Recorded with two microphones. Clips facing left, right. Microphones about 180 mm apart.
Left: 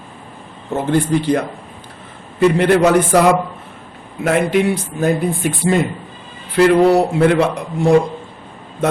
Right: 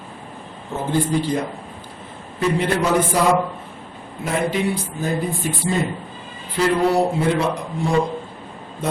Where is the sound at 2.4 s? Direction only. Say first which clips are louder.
Left 8 dB; 75° left (ahead or behind).